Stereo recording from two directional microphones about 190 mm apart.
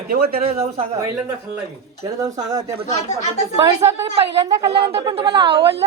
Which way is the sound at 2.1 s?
20° right (ahead or behind).